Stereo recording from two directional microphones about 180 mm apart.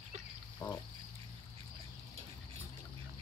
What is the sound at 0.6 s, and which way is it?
Frog, 20° left (ahead or behind).